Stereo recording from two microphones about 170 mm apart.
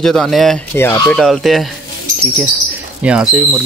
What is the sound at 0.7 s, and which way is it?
Speech, 15° left (ahead or behind).